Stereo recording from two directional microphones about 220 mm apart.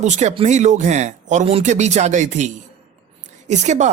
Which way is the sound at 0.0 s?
30° right (ahead or behind).